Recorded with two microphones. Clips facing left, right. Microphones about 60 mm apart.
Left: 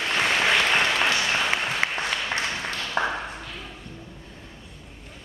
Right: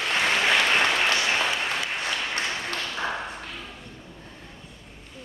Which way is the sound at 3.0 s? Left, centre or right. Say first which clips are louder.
Left 6 dB; left.